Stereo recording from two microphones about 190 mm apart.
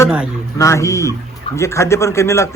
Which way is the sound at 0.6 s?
15° left (ahead or behind).